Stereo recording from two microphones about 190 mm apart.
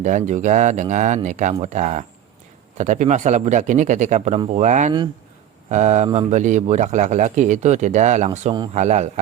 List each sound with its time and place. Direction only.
0.0 s a man's voice: 40° right (ahead or behind)